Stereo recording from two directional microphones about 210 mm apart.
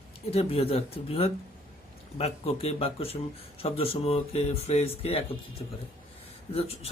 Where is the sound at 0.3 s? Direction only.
30° left (ahead or behind).